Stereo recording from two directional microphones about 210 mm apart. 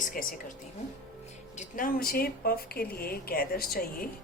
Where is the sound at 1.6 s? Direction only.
40° left (ahead or behind).